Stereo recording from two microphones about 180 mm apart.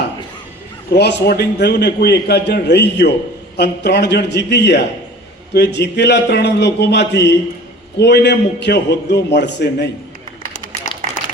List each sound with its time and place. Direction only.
0.9 s a man's voice: 70° left (ahead or behind)